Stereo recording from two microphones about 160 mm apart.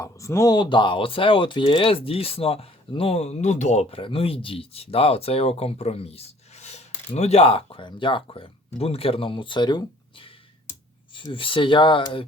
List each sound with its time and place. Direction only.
0.0 s speech: 20° left (ahead or behind)